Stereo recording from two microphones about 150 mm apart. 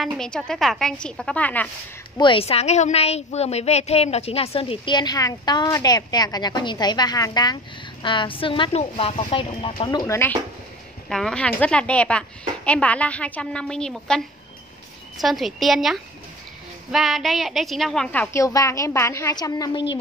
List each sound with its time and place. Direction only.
0.0 s a woman's voice: 5° left (ahead or behind)
2.1 s a woman's voice: 35° left (ahead or behind)
9.8 s a woman's voice: 20° left (ahead or behind)
11.1 s a woman's voice: 5° left (ahead or behind)
18.2 s a woman's voice: 20° left (ahead or behind)